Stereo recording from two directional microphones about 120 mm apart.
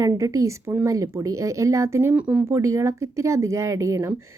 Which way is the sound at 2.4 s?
25° right (ahead or behind).